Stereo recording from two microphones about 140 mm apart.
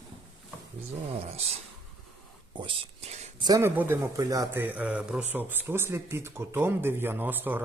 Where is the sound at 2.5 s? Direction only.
40° right (ahead or behind).